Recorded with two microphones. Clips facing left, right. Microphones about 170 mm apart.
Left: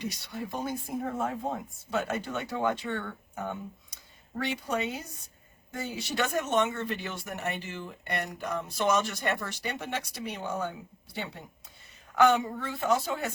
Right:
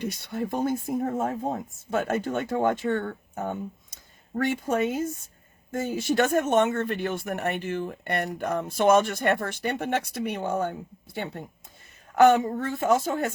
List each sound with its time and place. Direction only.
0.0 s speech: 55° right (ahead or behind)